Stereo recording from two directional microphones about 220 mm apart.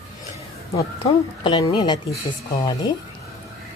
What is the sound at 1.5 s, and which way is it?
Speech, 20° left (ahead or behind).